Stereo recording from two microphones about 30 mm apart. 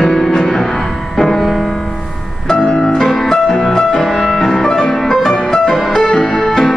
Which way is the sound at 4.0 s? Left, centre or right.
Centre.